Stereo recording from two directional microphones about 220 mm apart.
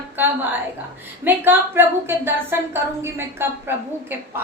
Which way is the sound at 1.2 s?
10° right (ahead or behind).